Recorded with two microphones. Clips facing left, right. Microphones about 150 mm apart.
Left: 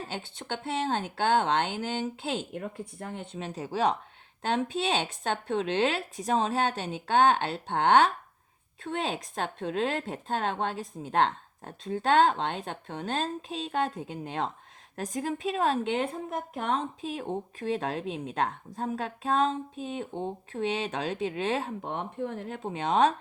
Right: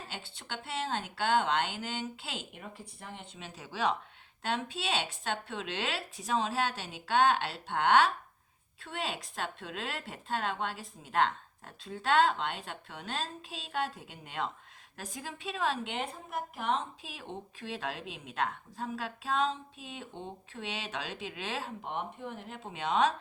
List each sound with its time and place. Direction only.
0.2 s speech: 45° left (ahead or behind)
15.0 s a woman's voice: 45° left (ahead or behind)